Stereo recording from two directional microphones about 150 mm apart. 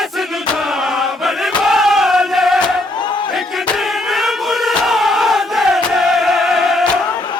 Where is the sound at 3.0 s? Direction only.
30° left (ahead or behind).